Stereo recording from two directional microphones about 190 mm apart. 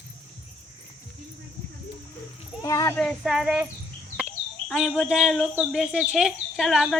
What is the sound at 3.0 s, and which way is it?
Speech, centre (ahead or behind).